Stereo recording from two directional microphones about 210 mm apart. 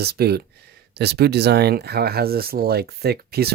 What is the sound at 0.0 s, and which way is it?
Speech, 50° right (ahead or behind).